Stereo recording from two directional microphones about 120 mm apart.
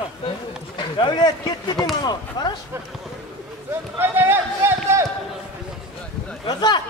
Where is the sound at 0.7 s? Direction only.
40° left (ahead or behind).